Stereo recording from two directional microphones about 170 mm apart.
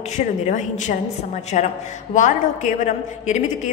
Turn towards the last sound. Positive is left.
turn(degrees=45)  # may be behind; listen again after turning